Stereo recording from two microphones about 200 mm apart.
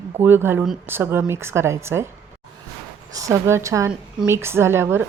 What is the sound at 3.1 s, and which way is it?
A woman's voice, 15° right (ahead or behind).